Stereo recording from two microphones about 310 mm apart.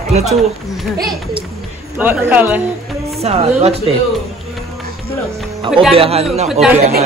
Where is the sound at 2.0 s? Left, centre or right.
Centre.